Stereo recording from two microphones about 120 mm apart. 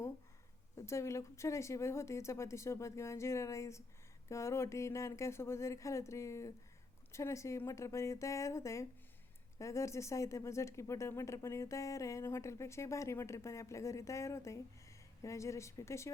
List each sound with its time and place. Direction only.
0.8 s speech: 25° left (ahead or behind)